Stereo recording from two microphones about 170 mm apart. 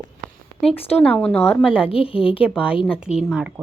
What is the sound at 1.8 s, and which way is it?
Speech, 35° left (ahead or behind).